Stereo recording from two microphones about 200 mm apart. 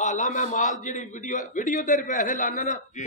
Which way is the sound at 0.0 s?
40° left (ahead or behind).